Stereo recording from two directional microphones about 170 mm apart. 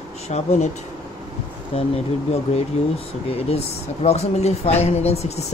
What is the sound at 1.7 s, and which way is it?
Speech, 35° left (ahead or behind).